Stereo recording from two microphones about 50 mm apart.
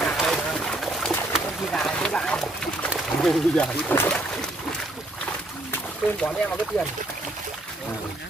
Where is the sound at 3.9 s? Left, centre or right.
Left.